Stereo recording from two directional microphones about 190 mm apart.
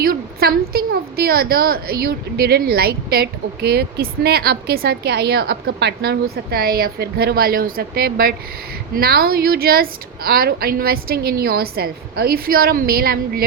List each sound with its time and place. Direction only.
0.0 s a woman's voice: 55° right (ahead or behind)